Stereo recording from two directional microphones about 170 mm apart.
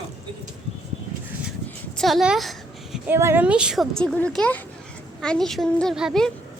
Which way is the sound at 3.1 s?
15° right (ahead or behind).